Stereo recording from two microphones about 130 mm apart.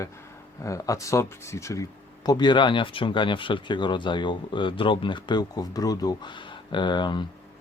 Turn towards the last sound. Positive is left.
turn(degrees=35)  # may be behind; listen again after turning